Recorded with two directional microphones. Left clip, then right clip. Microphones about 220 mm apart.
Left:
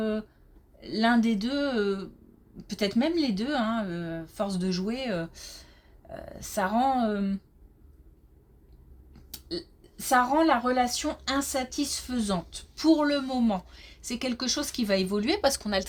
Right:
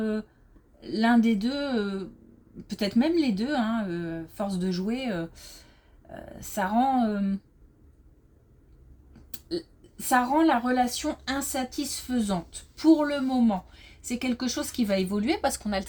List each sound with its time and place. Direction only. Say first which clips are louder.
0.0 s a woman's voice: even; 20° left (ahead or behind)
9.3 s a woman's voice: right 2 dB; 25° left (ahead or behind)